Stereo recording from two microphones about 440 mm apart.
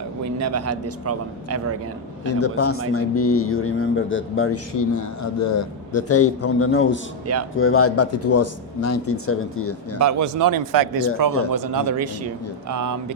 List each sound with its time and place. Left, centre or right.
0.3 s speech: right
2.4 s speech: left
10.0 s speech: right
11.3 s speech: left
11.5 s speech: right